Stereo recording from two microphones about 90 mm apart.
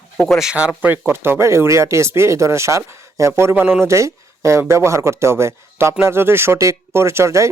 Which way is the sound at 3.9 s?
35° right (ahead or behind).